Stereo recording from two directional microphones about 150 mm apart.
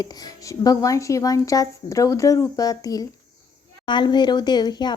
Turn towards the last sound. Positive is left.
turn(degrees=30)  # may be behind; listen again after turning